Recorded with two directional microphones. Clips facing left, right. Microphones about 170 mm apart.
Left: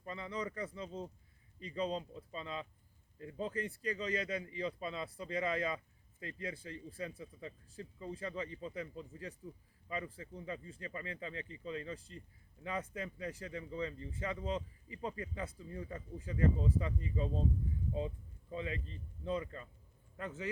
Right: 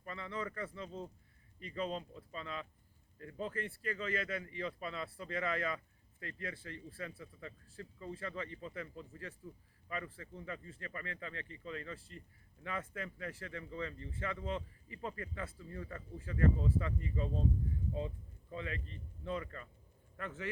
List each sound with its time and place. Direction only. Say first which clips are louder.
0.0 s speech: left 1 dB; 20° left (ahead or behind)
18.5 s speech: left 2 dB; 20° left (ahead or behind)